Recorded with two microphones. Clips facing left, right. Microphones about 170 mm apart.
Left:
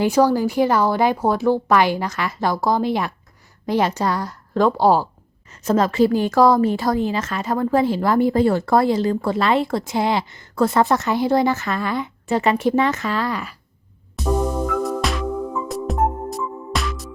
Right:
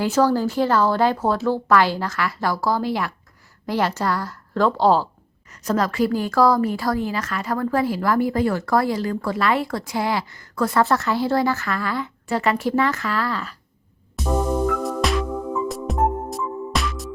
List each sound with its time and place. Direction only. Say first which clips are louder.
0.0 s speech: left 2 dB; 15° left (ahead or behind)
5.5 s a woman's voice: left 3 dB; 25° left (ahead or behind)
14.8 s music: even; centre (ahead or behind)